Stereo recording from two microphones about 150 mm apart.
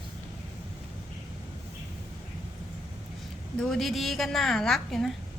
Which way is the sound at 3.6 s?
Centre (ahead or behind).